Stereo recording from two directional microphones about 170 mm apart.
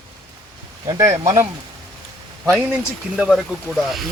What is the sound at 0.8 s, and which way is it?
Speech, 20° right (ahead or behind).